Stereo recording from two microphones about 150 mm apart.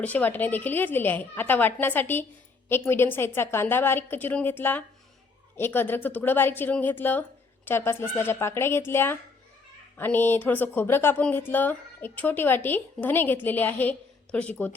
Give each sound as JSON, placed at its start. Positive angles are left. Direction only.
{"t": 0.0, "sound": "speech", "side_deg": 10}